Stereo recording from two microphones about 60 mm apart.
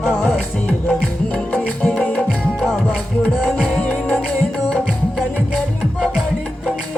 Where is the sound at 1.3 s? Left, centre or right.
Left.